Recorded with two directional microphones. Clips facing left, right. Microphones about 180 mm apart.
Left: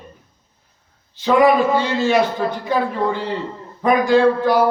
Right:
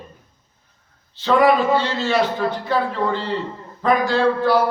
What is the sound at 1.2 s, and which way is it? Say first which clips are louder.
A man's voice: left 2 dB; 15° left (ahead or behind).